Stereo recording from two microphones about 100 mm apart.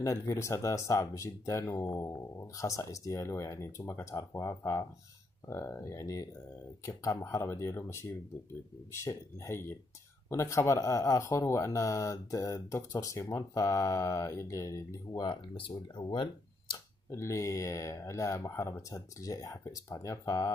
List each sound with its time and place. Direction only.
0.0 s speech: 30° left (ahead or behind)
16.0 s a sound: 50° left (ahead or behind)
17.1 s speech: 30° left (ahead or behind)